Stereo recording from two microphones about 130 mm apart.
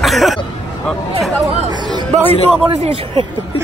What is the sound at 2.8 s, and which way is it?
Speech, 50° right (ahead or behind).